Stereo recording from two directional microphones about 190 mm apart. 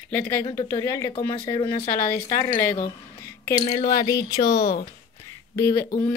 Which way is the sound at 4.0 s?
20° left (ahead or behind).